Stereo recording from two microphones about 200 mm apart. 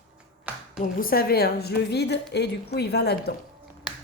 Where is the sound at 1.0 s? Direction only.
45° left (ahead or behind).